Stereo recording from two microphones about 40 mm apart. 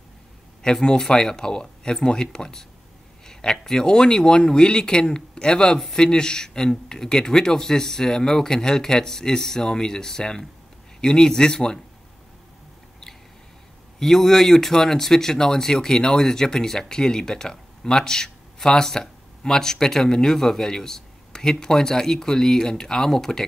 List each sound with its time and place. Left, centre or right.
0.6 s speech: centre
3.6 s speech: centre
13.9 s speech: centre